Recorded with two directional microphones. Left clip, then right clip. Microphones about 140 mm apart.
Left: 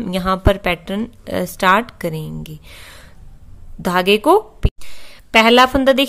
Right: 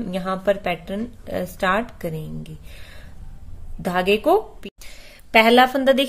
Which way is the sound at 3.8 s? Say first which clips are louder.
Left 5 dB; 30° left (ahead or behind).